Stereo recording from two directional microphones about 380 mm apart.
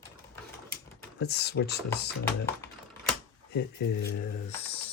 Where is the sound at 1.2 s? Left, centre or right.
Left.